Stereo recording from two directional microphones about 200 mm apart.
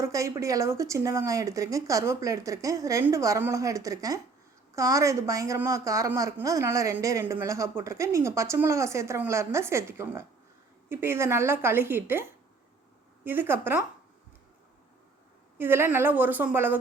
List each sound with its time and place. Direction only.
0.0 s a woman's voice: 15° right (ahead or behind)
13.2 s a woman's voice: 10° right (ahead or behind)
15.5 s a woman's voice: 10° right (ahead or behind)